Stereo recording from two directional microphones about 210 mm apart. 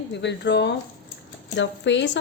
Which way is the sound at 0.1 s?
55° left (ahead or behind).